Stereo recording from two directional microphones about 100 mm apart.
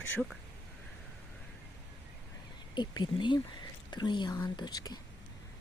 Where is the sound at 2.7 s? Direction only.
50° left (ahead or behind).